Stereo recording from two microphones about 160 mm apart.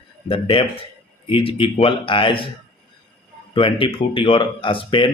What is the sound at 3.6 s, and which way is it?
Speech, 35° left (ahead or behind).